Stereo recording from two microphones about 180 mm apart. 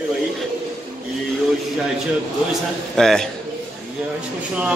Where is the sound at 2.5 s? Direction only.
5° left (ahead or behind).